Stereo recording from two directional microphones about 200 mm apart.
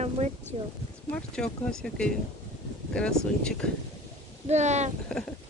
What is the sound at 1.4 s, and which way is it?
Speech, 5° left (ahead or behind).